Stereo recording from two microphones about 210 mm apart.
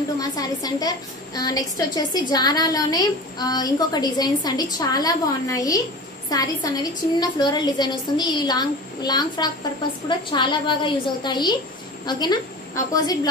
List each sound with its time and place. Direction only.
0.2 s a woman's voice: 15° left (ahead or behind)